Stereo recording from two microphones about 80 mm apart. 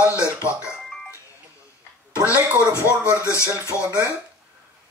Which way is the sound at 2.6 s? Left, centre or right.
Left.